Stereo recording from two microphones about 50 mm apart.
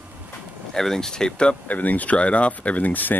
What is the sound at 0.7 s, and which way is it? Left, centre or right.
Speech, centre.